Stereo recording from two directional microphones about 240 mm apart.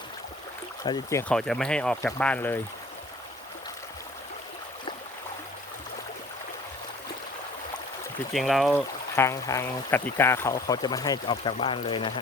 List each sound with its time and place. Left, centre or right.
0.9 s speech: centre
1.3 s speech: centre
8.3 s speech: centre; by 12.2 s left